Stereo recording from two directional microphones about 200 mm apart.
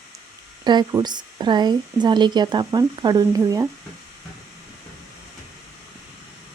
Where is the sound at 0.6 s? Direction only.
20° right (ahead or behind).